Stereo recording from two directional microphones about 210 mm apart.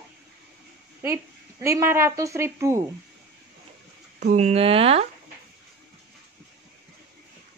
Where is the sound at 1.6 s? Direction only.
10° right (ahead or behind).